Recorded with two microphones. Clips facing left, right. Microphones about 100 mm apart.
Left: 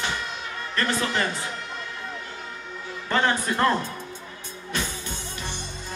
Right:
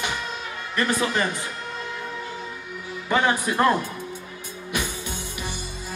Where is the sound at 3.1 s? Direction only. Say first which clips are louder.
Right 2 dB; 15° right (ahead or behind).